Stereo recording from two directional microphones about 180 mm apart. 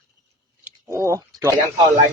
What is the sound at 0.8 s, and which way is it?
Speech, 15° right (ahead or behind).